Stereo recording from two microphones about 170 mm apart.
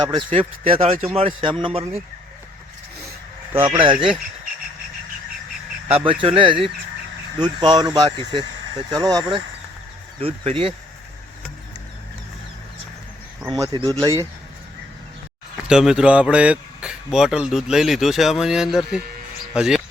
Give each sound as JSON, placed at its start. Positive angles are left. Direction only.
{"t": 0.0, "sound": "a man's voice", "side_deg": -25}
{"t": 3.6, "sound": "speech", "side_deg": -30}
{"t": 6.2, "sound": "a man's voice", "side_deg": -30}
{"t": 10.2, "sound": "a man's voice", "side_deg": -35}
{"t": 13.5, "sound": "speech", "side_deg": -25}
{"t": 15.6, "sound": "speech", "side_deg": -5}